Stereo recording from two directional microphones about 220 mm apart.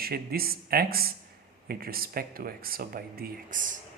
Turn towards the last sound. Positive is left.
turn(degrees=-35)  # may be behind; listen again after turning